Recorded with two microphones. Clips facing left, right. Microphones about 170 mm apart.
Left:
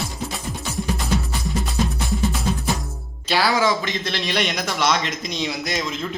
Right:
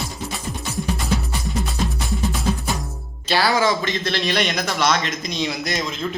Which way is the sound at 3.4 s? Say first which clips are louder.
Right 1 dB; 15° left (ahead or behind).